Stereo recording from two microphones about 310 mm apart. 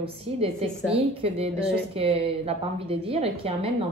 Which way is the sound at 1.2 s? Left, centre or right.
Centre.